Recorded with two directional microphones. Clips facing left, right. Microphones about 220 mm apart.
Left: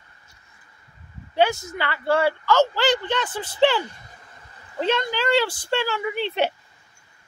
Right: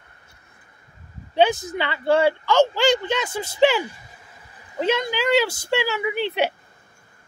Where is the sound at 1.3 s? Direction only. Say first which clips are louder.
Right 2 dB; 15° right (ahead or behind).